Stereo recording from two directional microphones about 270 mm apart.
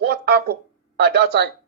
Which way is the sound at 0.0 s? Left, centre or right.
Right.